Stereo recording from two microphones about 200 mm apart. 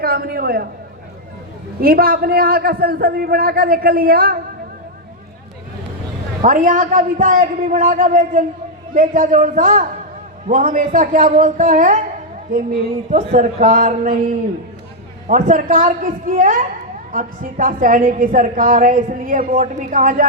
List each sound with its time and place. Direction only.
0.0 s a man's voice: 50° right (ahead or behind)
1.8 s a man's voice: 50° right (ahead or behind)
6.4 s a woman's voice: 40° right (ahead or behind)
13.1 s a woman's voice: 40° right (ahead or behind)